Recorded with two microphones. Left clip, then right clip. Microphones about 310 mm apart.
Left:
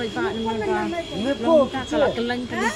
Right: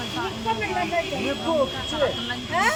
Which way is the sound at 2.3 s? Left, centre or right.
Centre.